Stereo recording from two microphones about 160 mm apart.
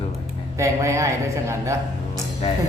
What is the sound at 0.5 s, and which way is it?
Speech, 15° right (ahead or behind).